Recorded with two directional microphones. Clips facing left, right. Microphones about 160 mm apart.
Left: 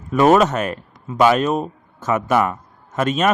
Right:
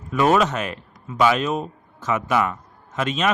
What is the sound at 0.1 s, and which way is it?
A man's voice, 45° left (ahead or behind).